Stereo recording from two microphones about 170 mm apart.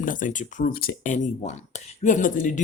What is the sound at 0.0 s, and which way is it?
Speech, 50° left (ahead or behind).